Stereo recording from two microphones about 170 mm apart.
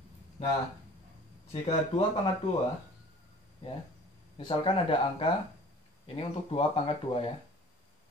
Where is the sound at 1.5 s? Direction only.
35° left (ahead or behind).